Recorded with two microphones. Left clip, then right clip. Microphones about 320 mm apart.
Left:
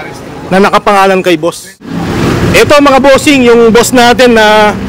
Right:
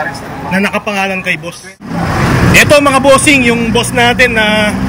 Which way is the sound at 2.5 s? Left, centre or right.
Centre.